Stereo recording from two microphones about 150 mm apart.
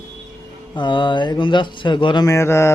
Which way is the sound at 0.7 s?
30° left (ahead or behind).